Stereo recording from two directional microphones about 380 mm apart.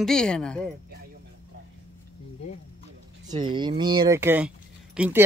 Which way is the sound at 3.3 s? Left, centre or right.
Centre.